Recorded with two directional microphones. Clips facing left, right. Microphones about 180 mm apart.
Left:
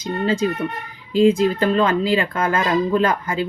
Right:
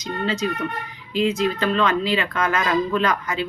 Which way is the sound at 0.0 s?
30° left (ahead or behind).